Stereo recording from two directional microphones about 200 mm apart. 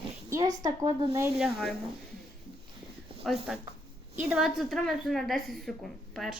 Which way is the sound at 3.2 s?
Centre (ahead or behind).